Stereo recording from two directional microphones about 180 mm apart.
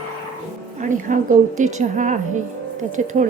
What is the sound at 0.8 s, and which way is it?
A woman's voice, 45° right (ahead or behind).